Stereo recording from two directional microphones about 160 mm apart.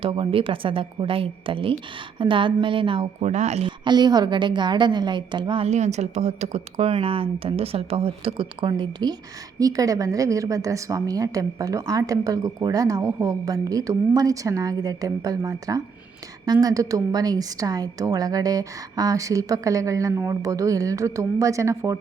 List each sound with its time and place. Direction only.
0.0 s a woman's voice: 35° right (ahead or behind)
3.2 s speech: 45° right (ahead or behind)
3.7 s a woman's voice: 25° right (ahead or behind)